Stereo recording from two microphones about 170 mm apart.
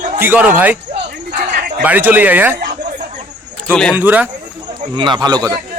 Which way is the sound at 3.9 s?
10° right (ahead or behind).